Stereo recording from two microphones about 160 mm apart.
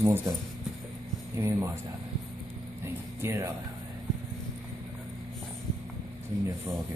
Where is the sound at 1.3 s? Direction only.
15° right (ahead or behind).